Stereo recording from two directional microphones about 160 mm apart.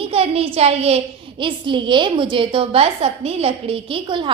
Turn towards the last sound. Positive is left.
turn(degrees=-30)  # may be behind; listen again after turning